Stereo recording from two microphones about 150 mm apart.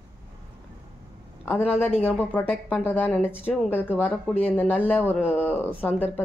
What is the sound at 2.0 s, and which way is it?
Speech, 10° left (ahead or behind).